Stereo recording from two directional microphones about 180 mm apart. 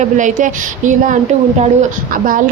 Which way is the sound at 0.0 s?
45° right (ahead or behind).